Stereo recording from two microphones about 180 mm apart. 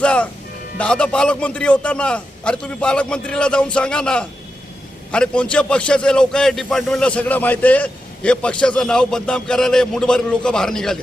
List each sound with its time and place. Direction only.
0.0 s a man's voice: 5° left (ahead or behind)